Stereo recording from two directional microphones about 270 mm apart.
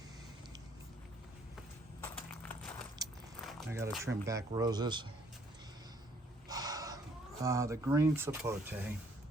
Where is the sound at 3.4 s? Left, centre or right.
Centre.